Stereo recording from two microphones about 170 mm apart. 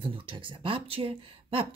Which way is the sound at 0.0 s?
30° right (ahead or behind).